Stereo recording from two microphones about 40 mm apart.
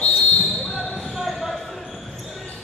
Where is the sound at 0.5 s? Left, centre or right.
Centre.